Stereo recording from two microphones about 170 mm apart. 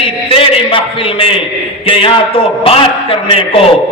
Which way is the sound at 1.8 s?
30° left (ahead or behind).